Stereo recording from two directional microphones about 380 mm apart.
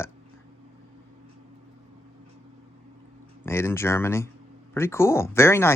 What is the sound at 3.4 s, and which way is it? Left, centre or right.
Speech, centre.